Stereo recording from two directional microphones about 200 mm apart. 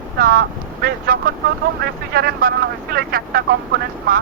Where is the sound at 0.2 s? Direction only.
50° right (ahead or behind).